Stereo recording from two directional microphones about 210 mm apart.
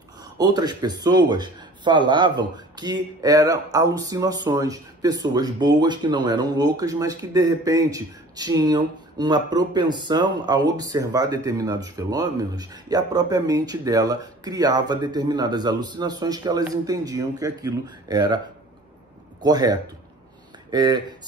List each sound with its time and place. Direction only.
0.4 s speech: 20° right (ahead or behind)
19.4 s speech: 20° right (ahead or behind)